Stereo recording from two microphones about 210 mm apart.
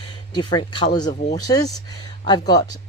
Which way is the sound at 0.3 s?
20° left (ahead or behind).